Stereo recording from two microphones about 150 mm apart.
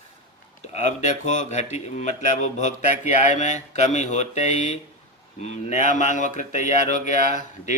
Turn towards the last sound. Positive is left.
turn(degrees=55)  # may be behind; listen again after turning